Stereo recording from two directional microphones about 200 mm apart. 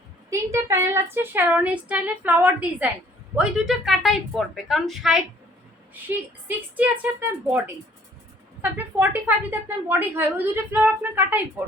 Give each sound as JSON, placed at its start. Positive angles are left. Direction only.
{"t": 0.3, "sound": "a woman's voice", "side_deg": -15}
{"t": 8.6, "sound": "a woman's voice", "side_deg": -10}